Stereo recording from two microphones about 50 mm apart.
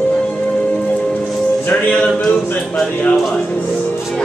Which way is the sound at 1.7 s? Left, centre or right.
Left.